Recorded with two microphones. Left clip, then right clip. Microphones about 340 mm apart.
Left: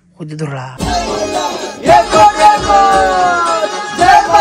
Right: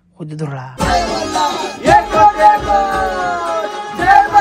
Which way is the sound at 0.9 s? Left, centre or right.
Centre.